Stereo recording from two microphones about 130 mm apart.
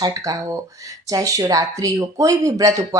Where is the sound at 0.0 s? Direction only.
25° right (ahead or behind).